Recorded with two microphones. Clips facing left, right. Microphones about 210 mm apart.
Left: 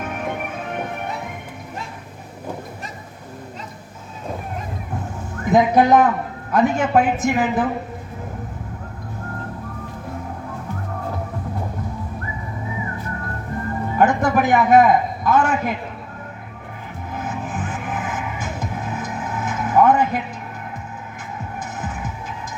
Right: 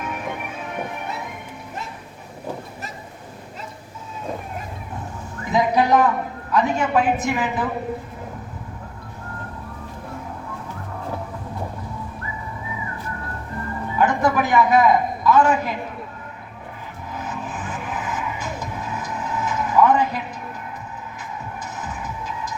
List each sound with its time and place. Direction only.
0.0 s music: 55° left (ahead or behind)
5.5 s a woman's voice: 50° left (ahead or behind)
14.0 s a man's voice: 50° left (ahead or behind)
17.2 s music: 50° left (ahead or behind)